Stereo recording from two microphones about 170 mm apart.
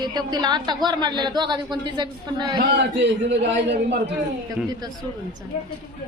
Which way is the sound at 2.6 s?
90° right.